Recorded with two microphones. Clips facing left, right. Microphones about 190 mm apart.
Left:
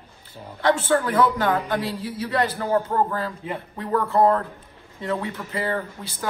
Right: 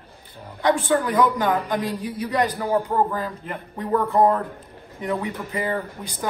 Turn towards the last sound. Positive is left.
turn(degrees=-15)  # may be behind; listen again after turning